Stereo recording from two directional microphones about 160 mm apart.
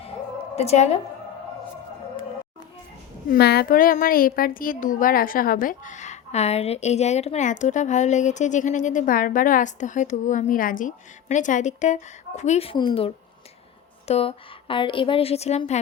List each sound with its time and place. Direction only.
0.5 s a woman's voice: 40° left (ahead or behind)
3.2 s a child's voice: 90° left; by 15.8 s 45° left (ahead or behind)